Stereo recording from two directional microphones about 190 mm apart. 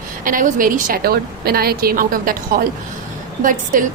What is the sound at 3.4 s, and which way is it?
Speech, 45° right (ahead or behind).